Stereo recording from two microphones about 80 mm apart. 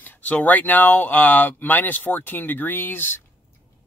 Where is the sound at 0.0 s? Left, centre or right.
Left.